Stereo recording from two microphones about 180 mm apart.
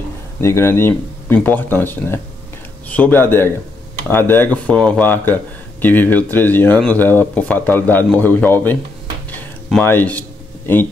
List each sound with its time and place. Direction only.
0.4 s speech: 15° left (ahead or behind)